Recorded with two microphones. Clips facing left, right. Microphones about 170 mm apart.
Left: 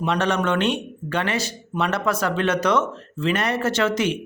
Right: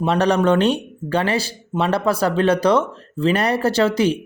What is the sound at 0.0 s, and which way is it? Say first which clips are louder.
Speech: right 5 dB; 35° right (ahead or behind).